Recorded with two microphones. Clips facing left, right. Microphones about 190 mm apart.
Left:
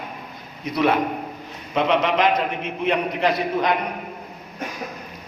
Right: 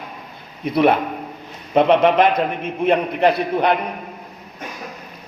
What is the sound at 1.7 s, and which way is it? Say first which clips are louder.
A man's voice: right 6 dB; 55° right (ahead or behind).